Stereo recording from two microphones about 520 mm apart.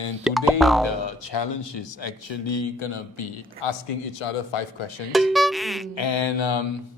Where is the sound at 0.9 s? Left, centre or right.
Left.